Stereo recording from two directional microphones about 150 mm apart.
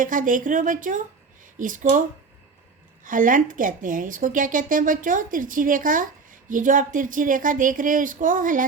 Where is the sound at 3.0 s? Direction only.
65° right (ahead or behind).